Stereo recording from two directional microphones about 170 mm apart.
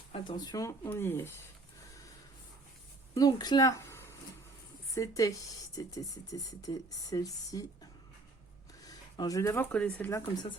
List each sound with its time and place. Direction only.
0.1 s speech: 25° left (ahead or behind)
3.2 s speech: 20° left (ahead or behind)
8.8 s speech: 20° left (ahead or behind)